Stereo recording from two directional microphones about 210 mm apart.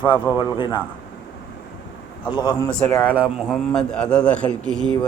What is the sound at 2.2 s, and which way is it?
Speech, 20° left (ahead or behind).